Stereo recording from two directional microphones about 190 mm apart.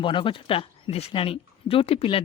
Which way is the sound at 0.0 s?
25° left (ahead or behind).